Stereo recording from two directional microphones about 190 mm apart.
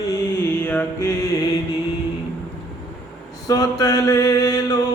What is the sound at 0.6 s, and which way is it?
Mantra, 10° left (ahead or behind).